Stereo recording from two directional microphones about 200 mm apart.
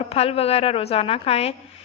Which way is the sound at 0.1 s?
30° left (ahead or behind).